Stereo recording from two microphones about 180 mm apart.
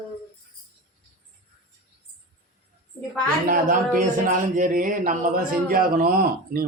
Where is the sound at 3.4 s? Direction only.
50° right (ahead or behind).